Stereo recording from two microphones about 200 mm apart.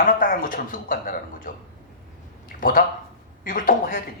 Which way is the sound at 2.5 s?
45° left (ahead or behind).